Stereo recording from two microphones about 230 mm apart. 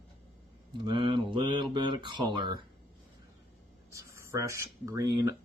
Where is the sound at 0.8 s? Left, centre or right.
Right.